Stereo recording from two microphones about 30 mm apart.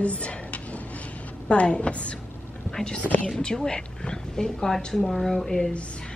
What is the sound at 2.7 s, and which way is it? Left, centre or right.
A woman's voice, left.